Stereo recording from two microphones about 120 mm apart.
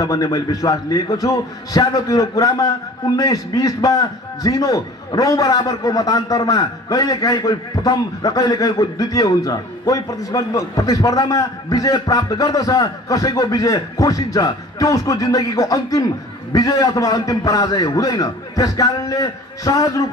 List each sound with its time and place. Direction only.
0.0 s a man's voice: 30° left (ahead or behind)